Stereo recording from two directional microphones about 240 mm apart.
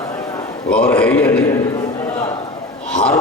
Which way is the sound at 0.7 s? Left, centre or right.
Centre.